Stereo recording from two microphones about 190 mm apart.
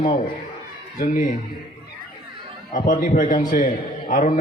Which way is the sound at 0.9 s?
40° left (ahead or behind).